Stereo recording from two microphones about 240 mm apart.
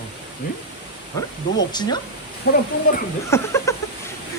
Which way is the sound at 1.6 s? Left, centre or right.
Centre.